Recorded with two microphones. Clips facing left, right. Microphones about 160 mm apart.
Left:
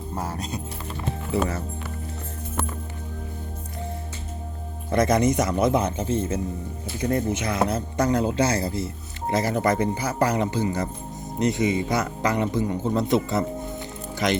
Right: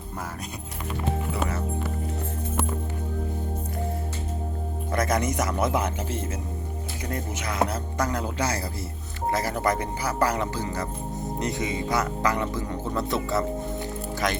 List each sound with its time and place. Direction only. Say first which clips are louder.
4.9 s speech: left 5 dB; 25° left (ahead or behind)